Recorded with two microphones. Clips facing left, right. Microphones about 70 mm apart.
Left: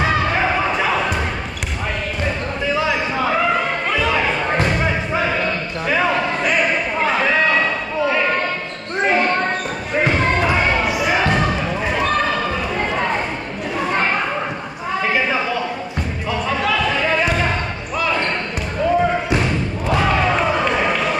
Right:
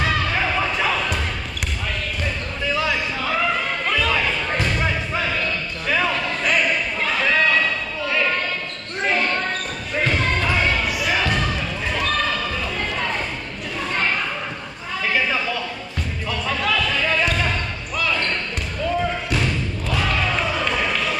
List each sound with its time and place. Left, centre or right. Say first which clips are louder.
0.0 s basketball bounce: left 4 dB; left
2.6 s music: left 3 dB; centre
9.0 s basketball bounce: left 4 dB; left
13.7 s children playing: left 4 dB; left
15.0 s a sound: left 2 dB; left
16.3 s basketball bounce: left 3 dB; centre
18.9 s a sound: left 6 dB; left